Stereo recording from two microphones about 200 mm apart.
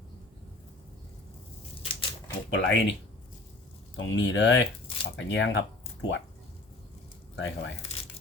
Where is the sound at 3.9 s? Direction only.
65° left (ahead or behind).